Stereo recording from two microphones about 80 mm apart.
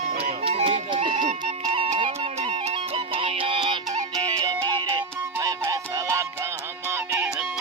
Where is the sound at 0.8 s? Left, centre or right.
Right.